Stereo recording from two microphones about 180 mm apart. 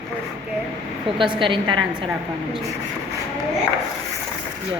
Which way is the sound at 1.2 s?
25° right (ahead or behind).